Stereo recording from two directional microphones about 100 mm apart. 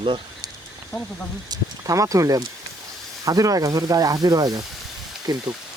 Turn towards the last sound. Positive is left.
turn(degrees=-45)  # may be behind; listen again after turning